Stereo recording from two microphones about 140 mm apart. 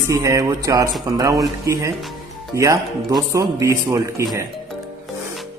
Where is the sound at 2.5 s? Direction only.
20° right (ahead or behind).